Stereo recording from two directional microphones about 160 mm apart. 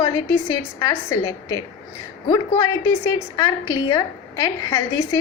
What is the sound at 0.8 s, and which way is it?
A woman's voice, 25° left (ahead or behind).